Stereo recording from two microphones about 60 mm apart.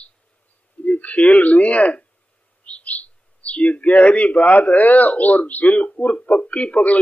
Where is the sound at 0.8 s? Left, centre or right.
Left.